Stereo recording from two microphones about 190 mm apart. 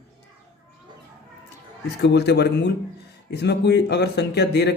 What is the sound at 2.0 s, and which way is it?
A man's voice, 60° left (ahead or behind).